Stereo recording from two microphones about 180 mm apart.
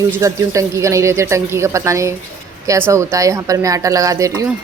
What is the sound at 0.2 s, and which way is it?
Speech, 15° right (ahead or behind).